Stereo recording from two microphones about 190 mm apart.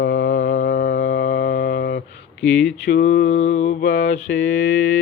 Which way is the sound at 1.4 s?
45° left (ahead or behind).